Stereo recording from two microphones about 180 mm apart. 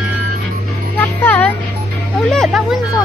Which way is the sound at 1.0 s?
10° left (ahead or behind).